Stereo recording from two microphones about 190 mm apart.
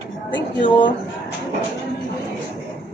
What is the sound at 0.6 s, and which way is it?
Speech, 25° left (ahead or behind).